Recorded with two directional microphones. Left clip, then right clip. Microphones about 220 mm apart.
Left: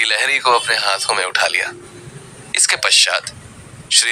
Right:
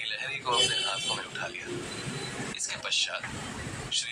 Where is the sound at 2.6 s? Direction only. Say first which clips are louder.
Left 17 dB; 45° left (ahead or behind).